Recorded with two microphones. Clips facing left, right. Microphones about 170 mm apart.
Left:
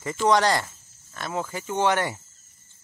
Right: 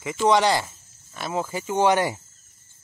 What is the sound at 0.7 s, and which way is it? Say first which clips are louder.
Cricket: right 1 dB; 10° right (ahead or behind).